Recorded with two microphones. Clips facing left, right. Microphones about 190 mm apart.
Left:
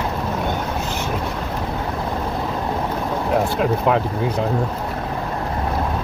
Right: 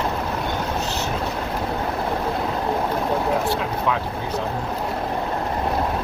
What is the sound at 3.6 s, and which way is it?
Vehicle, 60° left (ahead or behind).